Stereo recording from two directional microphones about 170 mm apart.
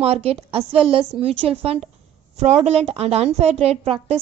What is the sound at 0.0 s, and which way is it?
A woman's voice, 35° right (ahead or behind).